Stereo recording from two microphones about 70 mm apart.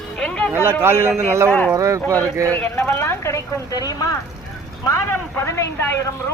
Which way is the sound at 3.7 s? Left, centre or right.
Left.